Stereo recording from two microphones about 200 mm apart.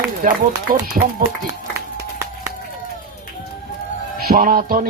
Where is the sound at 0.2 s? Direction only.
45° right (ahead or behind).